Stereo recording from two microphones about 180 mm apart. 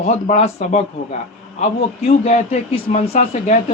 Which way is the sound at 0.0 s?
35° left (ahead or behind).